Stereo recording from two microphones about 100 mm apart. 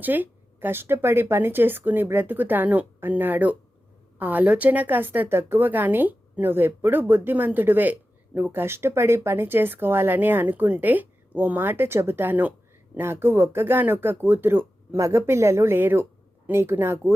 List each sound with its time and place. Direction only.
0.0 s a woman's voice: 20° right (ahead or behind)